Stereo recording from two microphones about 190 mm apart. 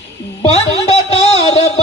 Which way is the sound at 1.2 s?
30° left (ahead or behind).